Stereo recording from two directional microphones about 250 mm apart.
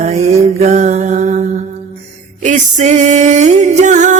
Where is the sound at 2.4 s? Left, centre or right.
Right.